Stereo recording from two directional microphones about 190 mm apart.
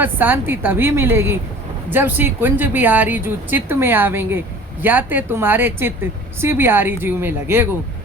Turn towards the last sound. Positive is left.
turn(degrees=-10)  # may be behind; listen again after turning